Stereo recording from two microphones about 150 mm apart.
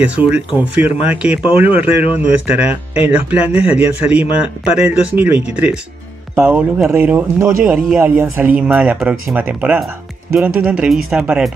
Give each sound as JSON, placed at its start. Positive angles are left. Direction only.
{"t": 0.0, "sound": "a man's voice", "side_deg": -10}